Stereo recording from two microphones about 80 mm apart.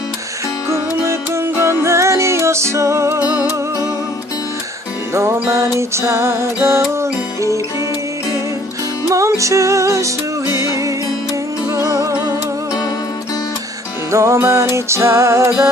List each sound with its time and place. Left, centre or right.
1.0 s music: right
3.2 s music: right
5.1 s music: right
9.0 s music: right
11.7 s music: right
14.1 s music: right